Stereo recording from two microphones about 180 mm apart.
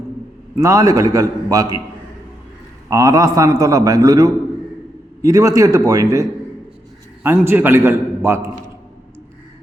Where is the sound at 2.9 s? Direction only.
20° right (ahead or behind).